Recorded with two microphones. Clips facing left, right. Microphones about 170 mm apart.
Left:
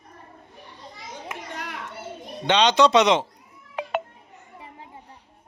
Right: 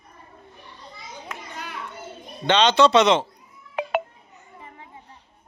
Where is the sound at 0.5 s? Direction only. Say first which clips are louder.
Left 1 dB; 15° left (ahead or behind).